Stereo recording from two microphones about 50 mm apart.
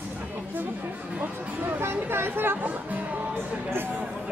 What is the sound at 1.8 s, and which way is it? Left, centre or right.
Speech, right.